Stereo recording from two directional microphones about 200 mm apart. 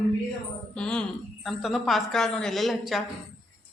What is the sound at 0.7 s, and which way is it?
A man's voice, 5° left (ahead or behind).